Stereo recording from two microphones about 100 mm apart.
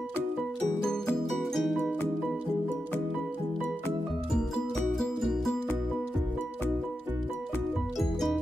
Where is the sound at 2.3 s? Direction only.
15° right (ahead or behind).